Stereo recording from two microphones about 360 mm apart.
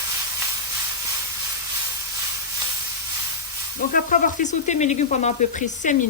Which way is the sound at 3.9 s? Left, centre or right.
Left.